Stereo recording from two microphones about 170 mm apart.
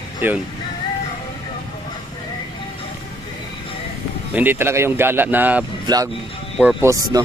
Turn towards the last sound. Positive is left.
turn(degrees=-15)  # may be behind; listen again after turning